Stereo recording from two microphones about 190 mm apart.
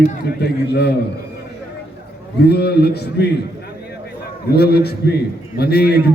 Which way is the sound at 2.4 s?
60° left (ahead or behind).